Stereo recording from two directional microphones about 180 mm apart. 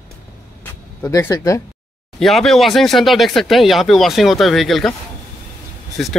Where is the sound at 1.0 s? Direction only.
15° left (ahead or behind).